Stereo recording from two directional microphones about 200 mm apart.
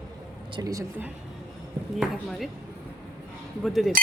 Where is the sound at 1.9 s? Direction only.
Centre (ahead or behind).